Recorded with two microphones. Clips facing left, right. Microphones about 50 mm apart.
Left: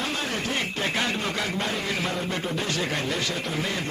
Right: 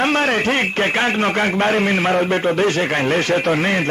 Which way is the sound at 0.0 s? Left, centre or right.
Right.